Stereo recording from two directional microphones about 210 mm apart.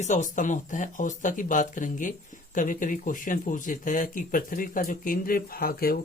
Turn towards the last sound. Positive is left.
turn(degrees=45)  # may be behind; listen again after turning